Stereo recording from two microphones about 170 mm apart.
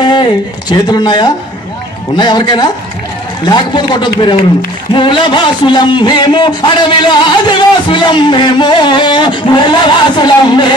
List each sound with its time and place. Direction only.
0.0 s a man's voice: 25° left (ahead or behind)